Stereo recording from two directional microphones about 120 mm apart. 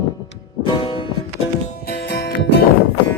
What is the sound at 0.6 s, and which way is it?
Music, 45° left (ahead or behind).